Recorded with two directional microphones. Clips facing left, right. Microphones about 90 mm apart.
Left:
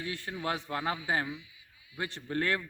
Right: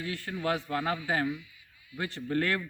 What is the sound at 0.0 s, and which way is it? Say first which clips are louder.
A man's voice: right 3 dB; 20° left (ahead or behind).